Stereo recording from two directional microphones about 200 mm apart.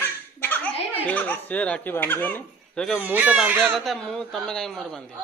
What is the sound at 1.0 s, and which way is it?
Speech, 10° left (ahead or behind).